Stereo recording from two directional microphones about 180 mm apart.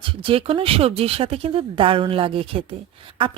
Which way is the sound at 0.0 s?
30° right (ahead or behind).